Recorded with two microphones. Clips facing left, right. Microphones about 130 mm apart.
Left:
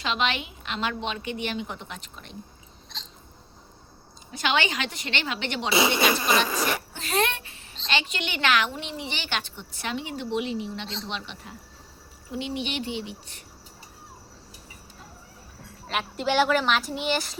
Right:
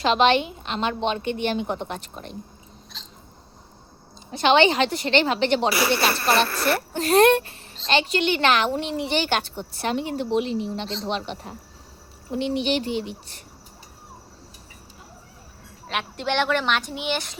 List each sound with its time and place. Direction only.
0.0 s a woman's voice: 35° right (ahead or behind)
4.3 s a woman's voice: 30° right (ahead or behind)
5.7 s speech: 20° left (ahead or behind)
6.9 s a woman's voice: 45° right (ahead or behind)
12.7 s a woman's voice: 40° right (ahead or behind)
15.9 s speech: centre (ahead or behind)